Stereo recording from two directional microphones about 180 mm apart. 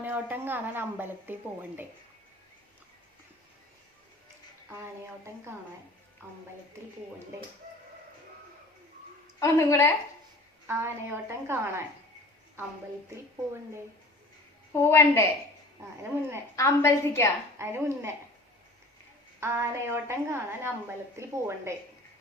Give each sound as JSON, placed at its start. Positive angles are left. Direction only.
{"t": 0.0, "sound": "a woman's voice", "side_deg": -10}
{"t": 9.4, "sound": "a woman's voice", "side_deg": 15}
{"t": 10.7, "sound": "a woman's voice", "side_deg": -15}
{"t": 14.7, "sound": "a woman's voice", "side_deg": 15}
{"t": 16.6, "sound": "a woman's voice", "side_deg": 15}
{"t": 17.6, "sound": "a woman's voice", "side_deg": -15}
{"t": 19.4, "sound": "a woman's voice", "side_deg": -15}